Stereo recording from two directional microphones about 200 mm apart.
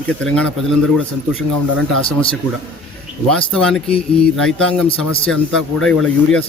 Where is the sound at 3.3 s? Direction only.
5° left (ahead or behind).